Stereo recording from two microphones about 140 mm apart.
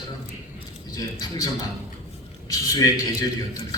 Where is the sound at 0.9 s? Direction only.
25° left (ahead or behind).